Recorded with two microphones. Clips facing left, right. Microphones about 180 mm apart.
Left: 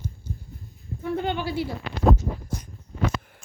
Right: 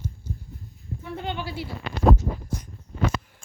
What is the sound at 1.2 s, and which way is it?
Speech, 50° left (ahead or behind).